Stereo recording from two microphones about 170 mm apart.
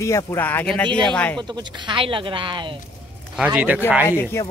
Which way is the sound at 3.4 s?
10° right (ahead or behind).